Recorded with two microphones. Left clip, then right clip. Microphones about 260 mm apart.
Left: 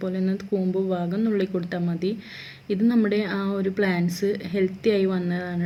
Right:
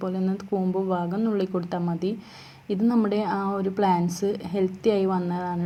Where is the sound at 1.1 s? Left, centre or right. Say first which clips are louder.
Left 1 dB; centre.